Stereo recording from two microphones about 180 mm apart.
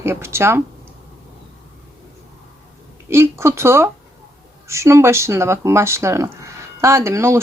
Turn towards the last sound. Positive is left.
turn(degrees=-15)  # may be behind; listen again after turning